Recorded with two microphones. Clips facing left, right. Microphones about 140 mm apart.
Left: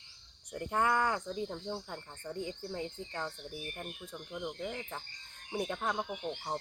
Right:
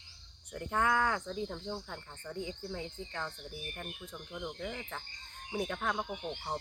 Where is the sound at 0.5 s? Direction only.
5° left (ahead or behind).